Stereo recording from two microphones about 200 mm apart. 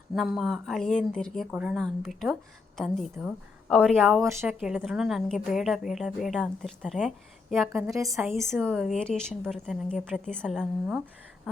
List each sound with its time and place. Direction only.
0.1 s a woman's voice: centre (ahead or behind)
7.7 s a woman's voice: 15° right (ahead or behind)
8.6 s a woman's voice: centre (ahead or behind)